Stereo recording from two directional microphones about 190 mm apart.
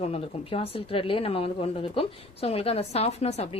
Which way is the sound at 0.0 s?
30° left (ahead or behind).